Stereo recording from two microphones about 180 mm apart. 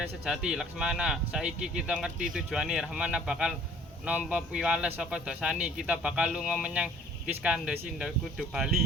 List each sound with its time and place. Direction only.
0.3 s speech: 5° right (ahead or behind)